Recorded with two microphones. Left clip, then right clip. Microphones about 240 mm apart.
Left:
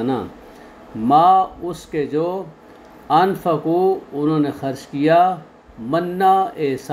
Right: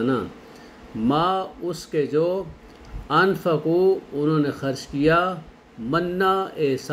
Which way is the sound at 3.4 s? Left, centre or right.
Centre.